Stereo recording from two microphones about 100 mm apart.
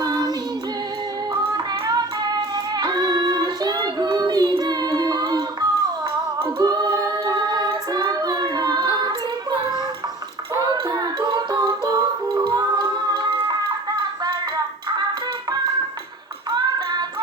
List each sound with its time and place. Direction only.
0.0 s female singing: 40° right (ahead or behind)
1.3 s child singing: 40° right (ahead or behind)
6.6 s music: 45° right (ahead or behind)
9.0 s female singing: 45° right (ahead or behind)
10.5 s music: 40° right (ahead or behind)
12.5 s a sound: 45° right (ahead or behind)
16.6 s a sound: 45° right (ahead or behind)